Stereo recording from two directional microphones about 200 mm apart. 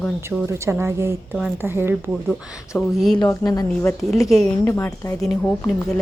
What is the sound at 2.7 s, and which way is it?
Speech, centre (ahead or behind).